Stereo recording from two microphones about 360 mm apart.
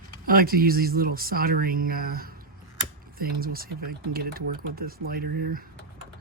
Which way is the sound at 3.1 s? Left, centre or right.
Right.